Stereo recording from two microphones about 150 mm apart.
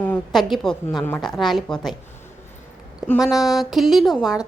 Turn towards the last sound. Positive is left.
turn(degrees=-5)  # may be behind; listen again after turning